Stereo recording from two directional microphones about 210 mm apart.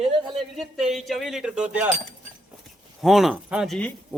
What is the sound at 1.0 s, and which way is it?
Speech, centre (ahead or behind).